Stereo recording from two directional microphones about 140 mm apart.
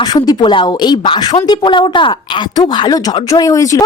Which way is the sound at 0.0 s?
30° left (ahead or behind).